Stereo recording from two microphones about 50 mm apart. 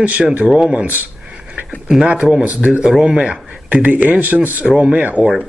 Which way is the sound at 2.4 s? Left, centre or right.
Right.